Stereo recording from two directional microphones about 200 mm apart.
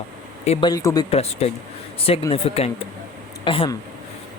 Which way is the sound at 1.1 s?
30° left (ahead or behind).